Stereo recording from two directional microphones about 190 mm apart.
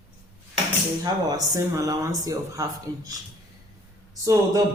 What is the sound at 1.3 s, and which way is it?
Speech, 20° right (ahead or behind).